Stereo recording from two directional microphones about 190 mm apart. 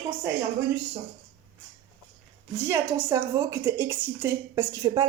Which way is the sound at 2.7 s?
15° right (ahead or behind).